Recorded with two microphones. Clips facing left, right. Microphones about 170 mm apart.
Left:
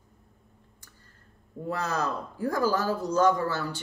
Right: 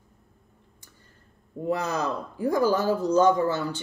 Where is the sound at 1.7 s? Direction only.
15° right (ahead or behind).